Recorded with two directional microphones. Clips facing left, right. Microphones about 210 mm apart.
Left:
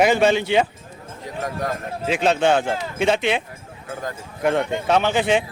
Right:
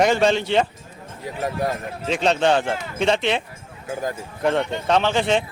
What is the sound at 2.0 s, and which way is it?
Speech, 5° left (ahead or behind).